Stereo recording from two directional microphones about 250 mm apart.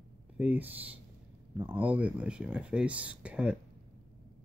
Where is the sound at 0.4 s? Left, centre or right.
Centre.